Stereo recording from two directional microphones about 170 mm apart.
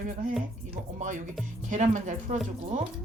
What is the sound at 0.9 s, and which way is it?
Speech, 50° right (ahead or behind).